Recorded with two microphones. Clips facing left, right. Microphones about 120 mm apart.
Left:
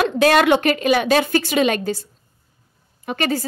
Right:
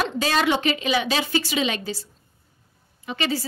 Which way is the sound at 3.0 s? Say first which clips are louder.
Left 4 dB; 50° left (ahead or behind).